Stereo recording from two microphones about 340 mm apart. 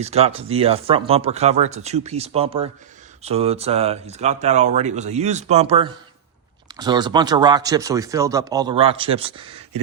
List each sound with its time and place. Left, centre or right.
0.0 s speech: centre